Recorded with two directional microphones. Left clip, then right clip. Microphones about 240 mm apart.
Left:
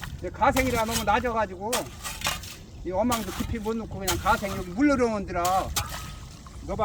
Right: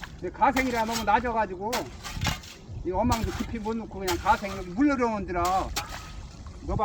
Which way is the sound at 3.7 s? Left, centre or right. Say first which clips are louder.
Left 2 dB; left.